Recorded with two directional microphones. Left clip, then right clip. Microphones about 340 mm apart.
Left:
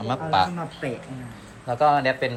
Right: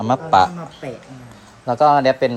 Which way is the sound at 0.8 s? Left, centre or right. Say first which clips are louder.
Even; centre.